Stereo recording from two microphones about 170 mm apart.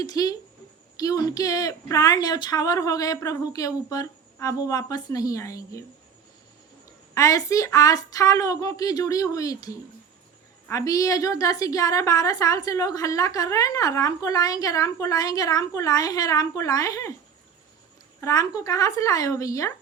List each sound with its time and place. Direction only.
0.0 s a woman's voice: 20° left (ahead or behind)
7.1 s a woman's voice: 20° left (ahead or behind)
18.2 s a woman's voice: 20° left (ahead or behind)